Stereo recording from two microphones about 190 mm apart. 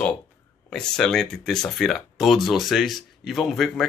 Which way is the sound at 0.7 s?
5° left (ahead or behind).